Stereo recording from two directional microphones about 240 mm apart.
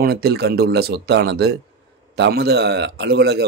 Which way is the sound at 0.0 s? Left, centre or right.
Right.